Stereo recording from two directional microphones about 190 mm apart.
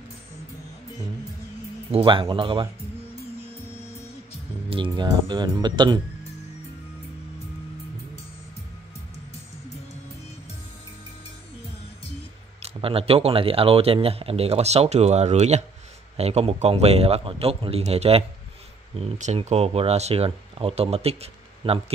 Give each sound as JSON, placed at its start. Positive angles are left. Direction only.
{"t": 1.9, "sound": "speech", "side_deg": -30}
{"t": 4.6, "sound": "speech", "side_deg": -25}
{"t": 12.6, "sound": "speech", "side_deg": -30}